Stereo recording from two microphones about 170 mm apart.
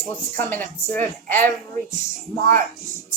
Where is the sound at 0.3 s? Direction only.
10° left (ahead or behind).